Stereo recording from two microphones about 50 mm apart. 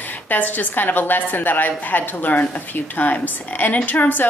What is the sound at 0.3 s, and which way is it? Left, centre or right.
A woman's voice, left.